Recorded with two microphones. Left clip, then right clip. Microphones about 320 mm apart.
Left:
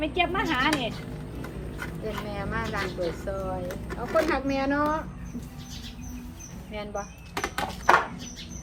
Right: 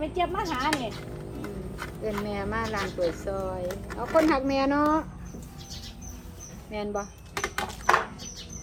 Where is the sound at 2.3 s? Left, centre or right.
Right.